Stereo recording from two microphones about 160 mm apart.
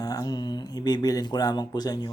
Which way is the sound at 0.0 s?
25° left (ahead or behind).